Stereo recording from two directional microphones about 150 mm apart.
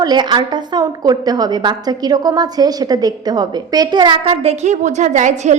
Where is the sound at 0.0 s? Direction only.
30° right (ahead or behind).